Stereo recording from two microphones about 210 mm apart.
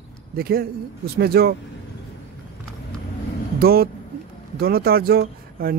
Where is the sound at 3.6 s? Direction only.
45° right (ahead or behind).